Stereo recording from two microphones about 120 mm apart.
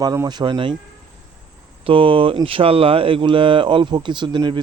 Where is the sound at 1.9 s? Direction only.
50° right (ahead or behind).